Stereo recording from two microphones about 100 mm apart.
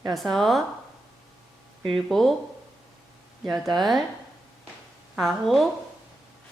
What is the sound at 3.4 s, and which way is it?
Speech, centre (ahead or behind).